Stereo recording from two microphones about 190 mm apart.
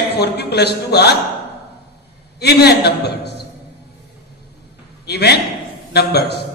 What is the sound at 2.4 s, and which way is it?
Speech, 60° left (ahead or behind).